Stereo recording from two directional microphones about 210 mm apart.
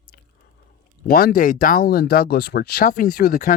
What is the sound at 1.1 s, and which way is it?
Speech, 45° left (ahead or behind).